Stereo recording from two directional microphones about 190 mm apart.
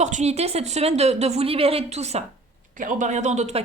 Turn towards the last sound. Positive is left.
turn(degrees=-35)  # may be behind; listen again after turning